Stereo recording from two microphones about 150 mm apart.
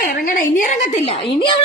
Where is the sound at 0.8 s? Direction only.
45° left (ahead or behind).